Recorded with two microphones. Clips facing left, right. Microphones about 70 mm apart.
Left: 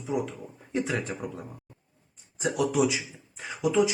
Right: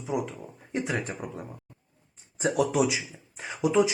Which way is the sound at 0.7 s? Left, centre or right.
Right.